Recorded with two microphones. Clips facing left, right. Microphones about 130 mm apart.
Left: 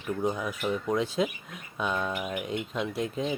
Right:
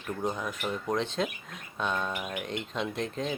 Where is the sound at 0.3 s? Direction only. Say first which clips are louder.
Left 2 dB; 5° left (ahead or behind).